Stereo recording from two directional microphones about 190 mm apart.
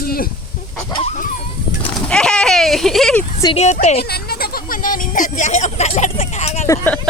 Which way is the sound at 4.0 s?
55° left (ahead or behind).